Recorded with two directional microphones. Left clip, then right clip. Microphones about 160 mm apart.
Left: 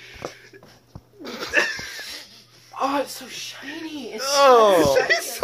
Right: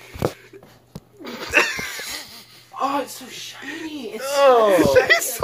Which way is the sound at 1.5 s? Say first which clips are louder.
Right 3 dB; 30° right (ahead or behind).